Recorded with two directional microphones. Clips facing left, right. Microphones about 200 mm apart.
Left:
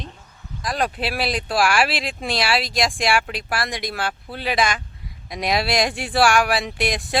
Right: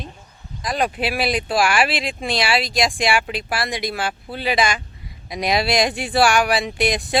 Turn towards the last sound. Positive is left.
turn(degrees=0)  # may be behind; listen again after turning